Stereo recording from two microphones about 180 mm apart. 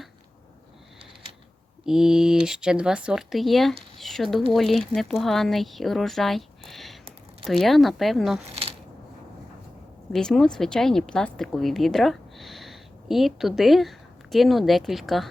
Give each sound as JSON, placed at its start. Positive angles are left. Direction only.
{"t": 1.8, "sound": "speech", "side_deg": -5}
{"t": 8.4, "sound": "speech", "side_deg": -35}
{"t": 10.1, "sound": "speech", "side_deg": 5}